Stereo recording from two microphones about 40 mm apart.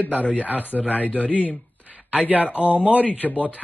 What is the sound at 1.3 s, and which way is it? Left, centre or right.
Speech, left.